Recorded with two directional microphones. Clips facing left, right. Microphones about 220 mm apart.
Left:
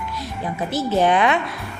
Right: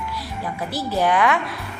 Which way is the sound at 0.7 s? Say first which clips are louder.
Left 3 dB; 25° left (ahead or behind).